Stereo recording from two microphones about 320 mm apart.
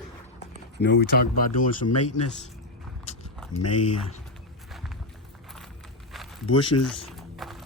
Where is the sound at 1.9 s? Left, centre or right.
Left.